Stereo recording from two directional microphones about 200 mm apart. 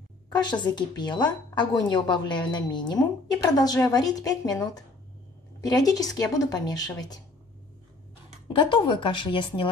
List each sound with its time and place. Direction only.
0.3 s a woman's voice: 20° left (ahead or behind)
8.5 s a woman's voice: 25° left (ahead or behind)